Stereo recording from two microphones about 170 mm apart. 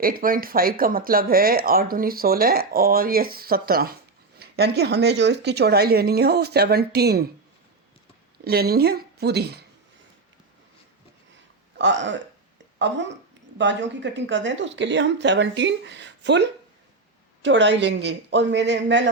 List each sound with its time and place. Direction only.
0.0 s speech: 55° right (ahead or behind)
8.4 s speech: 65° right (ahead or behind)
11.8 s speech: 90° right